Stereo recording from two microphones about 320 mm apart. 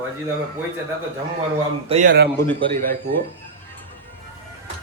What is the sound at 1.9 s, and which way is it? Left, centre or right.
Speech, right.